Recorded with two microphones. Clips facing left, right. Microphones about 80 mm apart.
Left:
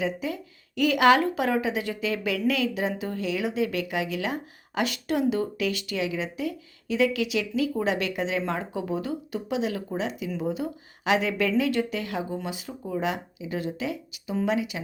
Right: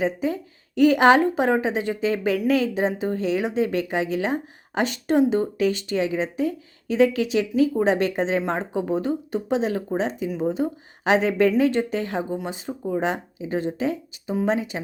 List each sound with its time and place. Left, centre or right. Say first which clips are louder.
0.0 s speech: right 5 dB; right
10.2 s speech: right 5 dB; right